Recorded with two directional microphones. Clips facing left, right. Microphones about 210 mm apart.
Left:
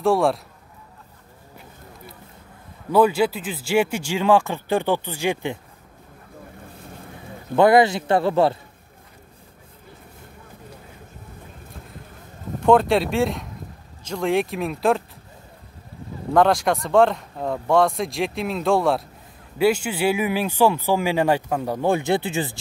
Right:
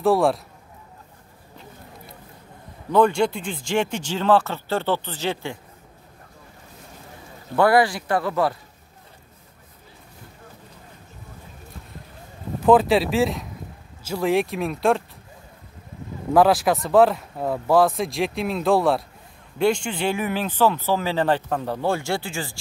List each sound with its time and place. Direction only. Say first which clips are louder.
0.0 s speech: even; centre (ahead or behind)
2.9 s speech: left 1 dB; 5° left (ahead or behind)
7.5 s speech: left 3 dB; 20° left (ahead or behind)
12.6 s speech: even; centre (ahead or behind)
16.3 s speech: right 1 dB; 5° right (ahead or behind); by 22.6 s 20° left (ahead or behind)